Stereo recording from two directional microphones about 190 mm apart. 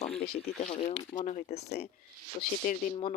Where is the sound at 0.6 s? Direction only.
35° left (ahead or behind).